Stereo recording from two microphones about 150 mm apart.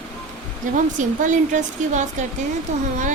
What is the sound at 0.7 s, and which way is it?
Speech, 60° right (ahead or behind).